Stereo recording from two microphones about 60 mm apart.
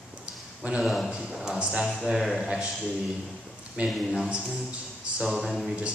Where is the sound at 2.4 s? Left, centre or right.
Centre.